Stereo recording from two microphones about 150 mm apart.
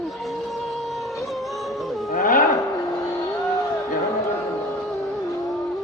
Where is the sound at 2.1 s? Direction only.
65° left (ahead or behind).